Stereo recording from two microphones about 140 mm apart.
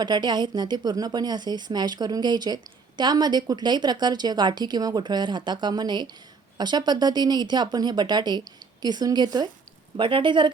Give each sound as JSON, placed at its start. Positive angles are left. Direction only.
{"t": 0.0, "sound": "speech", "side_deg": -30}